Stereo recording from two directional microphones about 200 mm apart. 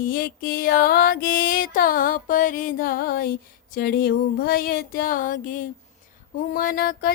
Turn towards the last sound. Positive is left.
turn(degrees=50)  # may be behind; listen again after turning